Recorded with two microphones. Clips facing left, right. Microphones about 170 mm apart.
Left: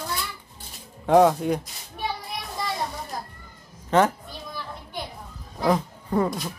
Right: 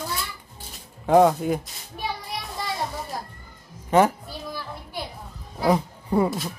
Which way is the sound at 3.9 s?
10° right (ahead or behind).